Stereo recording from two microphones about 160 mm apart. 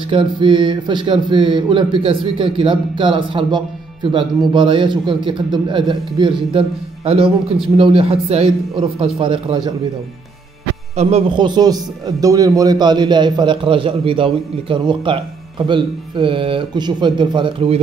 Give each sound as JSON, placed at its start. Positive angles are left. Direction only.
{"t": 0.1, "sound": "speech", "side_deg": -30}
{"t": 11.0, "sound": "a man's voice", "side_deg": -40}